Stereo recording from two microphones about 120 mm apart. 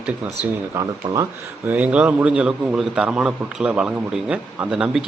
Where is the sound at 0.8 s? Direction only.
25° right (ahead or behind).